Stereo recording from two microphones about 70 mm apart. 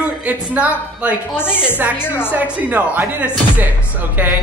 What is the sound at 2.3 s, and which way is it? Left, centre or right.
Speech, right.